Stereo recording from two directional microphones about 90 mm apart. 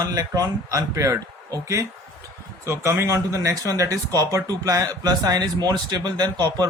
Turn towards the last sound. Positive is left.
turn(degrees=-50)  # may be behind; listen again after turning